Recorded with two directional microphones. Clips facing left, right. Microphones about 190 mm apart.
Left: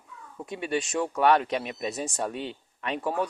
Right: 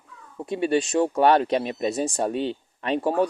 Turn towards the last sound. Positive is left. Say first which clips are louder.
# right 6 dB
turn(degrees=-30)  # may be behind; listen again after turning